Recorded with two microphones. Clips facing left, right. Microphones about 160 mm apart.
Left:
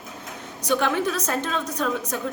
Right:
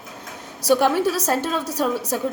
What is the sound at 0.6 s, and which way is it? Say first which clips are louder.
A woman's voice: right 5 dB; 35° right (ahead or behind).